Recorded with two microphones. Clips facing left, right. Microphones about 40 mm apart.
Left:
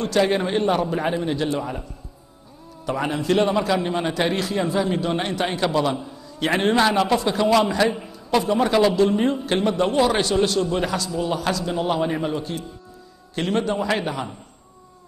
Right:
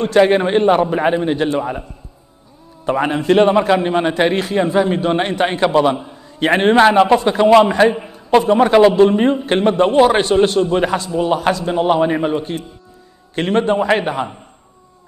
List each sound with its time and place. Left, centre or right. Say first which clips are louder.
0.0 s a man's voice: right 8 dB; right